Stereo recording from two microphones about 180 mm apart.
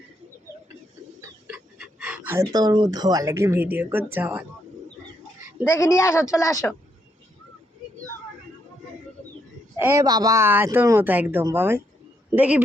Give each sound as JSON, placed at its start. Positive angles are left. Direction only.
{"t": 1.5, "sound": "speech", "side_deg": -5}
{"t": 5.6, "sound": "a woman's voice", "side_deg": 15}
{"t": 9.7, "sound": "speech", "side_deg": -15}